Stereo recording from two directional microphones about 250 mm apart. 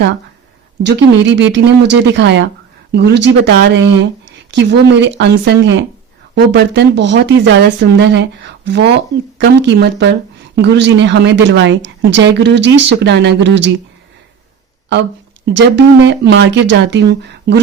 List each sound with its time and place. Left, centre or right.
0.8 s speech: right
15.4 s speech: right